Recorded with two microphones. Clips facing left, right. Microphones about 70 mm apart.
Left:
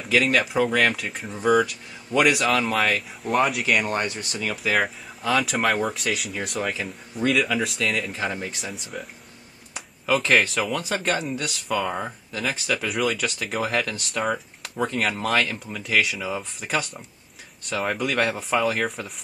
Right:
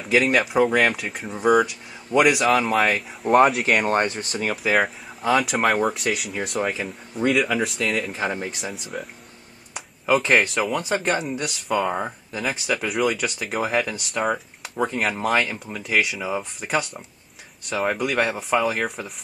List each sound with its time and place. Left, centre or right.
0.1 s speech: centre
2.6 s speech: centre
3.6 s speech: right
4.6 s speech: centre
8.1 s speech: centre
9.8 s a sound: centre
10.4 s speech: centre
15.6 s speech: centre